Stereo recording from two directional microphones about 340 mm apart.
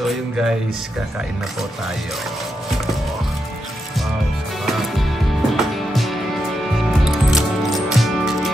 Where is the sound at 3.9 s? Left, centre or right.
Centre.